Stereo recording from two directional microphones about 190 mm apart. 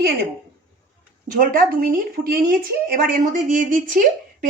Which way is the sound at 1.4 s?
50° right (ahead or behind).